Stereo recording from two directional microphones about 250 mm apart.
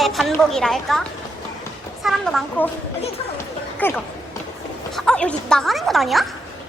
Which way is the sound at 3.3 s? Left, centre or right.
Centre.